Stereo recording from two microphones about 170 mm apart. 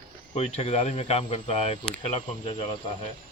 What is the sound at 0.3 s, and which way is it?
Speech, 40° left (ahead or behind).